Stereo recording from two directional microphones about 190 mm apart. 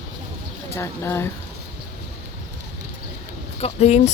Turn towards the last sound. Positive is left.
turn(degrees=35)  # may be behind; listen again after turning